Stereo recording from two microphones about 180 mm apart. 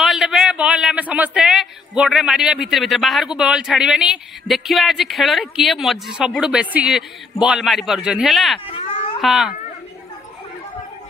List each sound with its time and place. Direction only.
0.0 s a man's voice: centre (ahead or behind)
8.6 s children playing: 30° left (ahead or behind)
9.2 s a man's voice: centre (ahead or behind)